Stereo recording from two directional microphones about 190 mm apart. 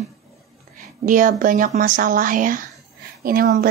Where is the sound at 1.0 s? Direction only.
45° right (ahead or behind).